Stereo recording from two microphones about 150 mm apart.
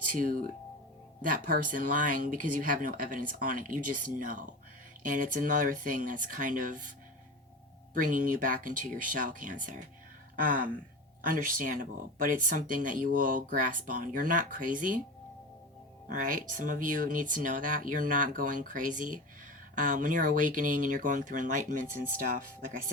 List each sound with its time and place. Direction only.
0.0 s speech: 65° right (ahead or behind)
7.9 s speech: 60° right (ahead or behind)
16.0 s speech: 65° right (ahead or behind)